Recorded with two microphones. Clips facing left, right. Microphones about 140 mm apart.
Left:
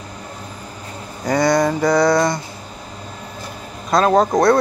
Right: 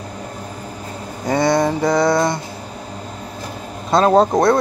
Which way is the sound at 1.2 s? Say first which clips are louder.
Even; 25° right (ahead or behind).